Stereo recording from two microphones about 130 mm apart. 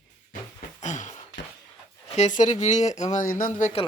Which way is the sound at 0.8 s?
70° left (ahead or behind).